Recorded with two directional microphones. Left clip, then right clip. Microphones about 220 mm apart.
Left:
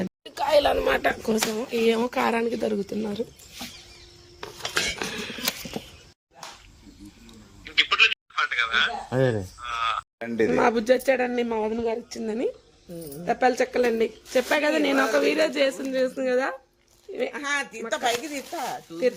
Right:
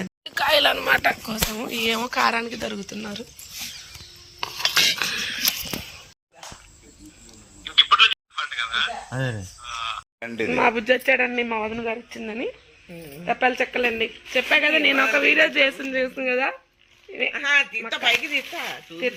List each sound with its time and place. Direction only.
0.0 s speech: centre (ahead or behind)
4.9 s a sound: 10° left (ahead or behind)
7.8 s a sound: centre (ahead or behind)
10.4 s a man's voice: 10° right (ahead or behind)
13.9 s a man's voice: 5° left (ahead or behind); by 17.3 s 10° right (ahead or behind)
17.3 s speech: 30° left (ahead or behind)